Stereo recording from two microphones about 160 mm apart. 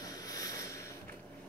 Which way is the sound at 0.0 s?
25° left (ahead or behind).